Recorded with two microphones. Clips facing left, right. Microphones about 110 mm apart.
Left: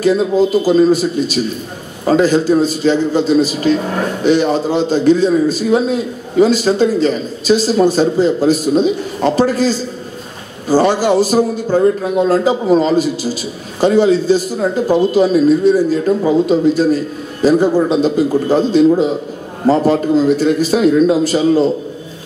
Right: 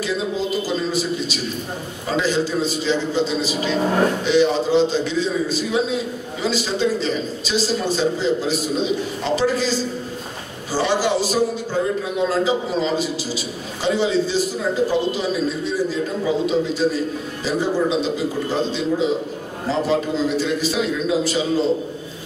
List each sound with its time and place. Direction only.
0.7 s a man's voice: 50° left (ahead or behind)